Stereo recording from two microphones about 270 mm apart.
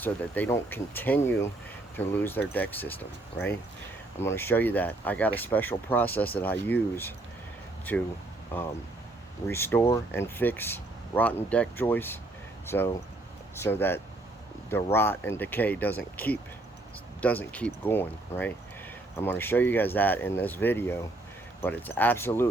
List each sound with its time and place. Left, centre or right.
0.0 s speech: centre